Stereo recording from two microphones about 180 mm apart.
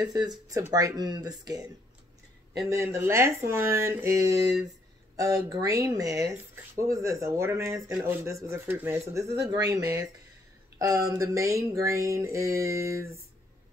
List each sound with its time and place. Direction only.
0.0 s speech: 20° right (ahead or behind)
2.7 s speech: 15° right (ahead or behind)